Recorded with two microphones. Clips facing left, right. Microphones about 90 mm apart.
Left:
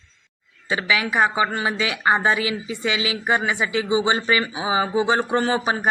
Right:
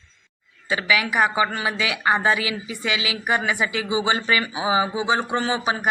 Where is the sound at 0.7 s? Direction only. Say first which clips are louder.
Even; 25° left (ahead or behind).